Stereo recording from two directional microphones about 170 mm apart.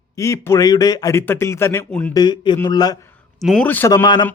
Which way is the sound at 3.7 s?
10° left (ahead or behind).